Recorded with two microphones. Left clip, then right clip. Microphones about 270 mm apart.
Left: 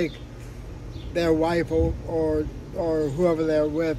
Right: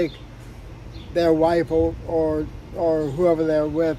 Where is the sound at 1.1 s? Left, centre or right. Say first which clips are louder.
Right 4 dB; centre.